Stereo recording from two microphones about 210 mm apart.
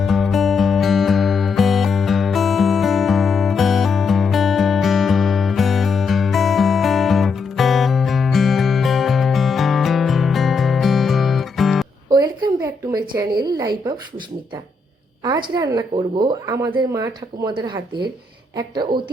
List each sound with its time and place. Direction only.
0.0 s music: centre (ahead or behind)
12.0 s a sound: 20° right (ahead or behind)
15.2 s speech: 20° right (ahead or behind)